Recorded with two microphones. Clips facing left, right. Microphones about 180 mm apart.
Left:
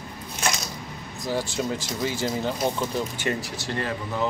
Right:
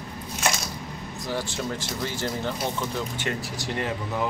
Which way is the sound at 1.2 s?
10° left (ahead or behind).